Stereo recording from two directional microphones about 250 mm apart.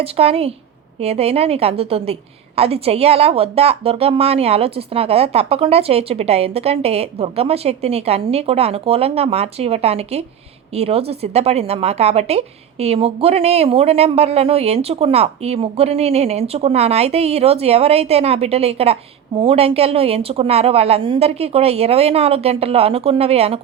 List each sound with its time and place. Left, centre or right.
0.0 s speech: right